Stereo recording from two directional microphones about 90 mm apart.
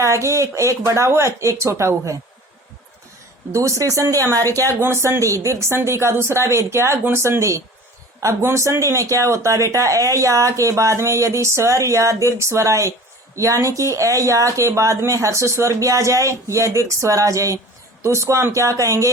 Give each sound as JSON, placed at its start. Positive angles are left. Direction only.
{"t": 0.0, "sound": "speech", "side_deg": -35}
{"t": 3.5, "sound": "speech", "side_deg": -35}